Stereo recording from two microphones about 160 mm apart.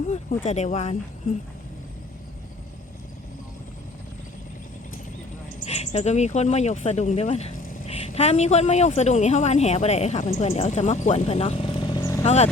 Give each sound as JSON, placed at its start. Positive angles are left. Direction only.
{"t": 0.4, "sound": "speech", "side_deg": 45}
{"t": 5.6, "sound": "speech", "side_deg": 40}
{"t": 7.5, "sound": "vehicle", "side_deg": 60}
{"t": 7.9, "sound": "a woman's voice", "side_deg": 40}
{"t": 12.2, "sound": "speech", "side_deg": 45}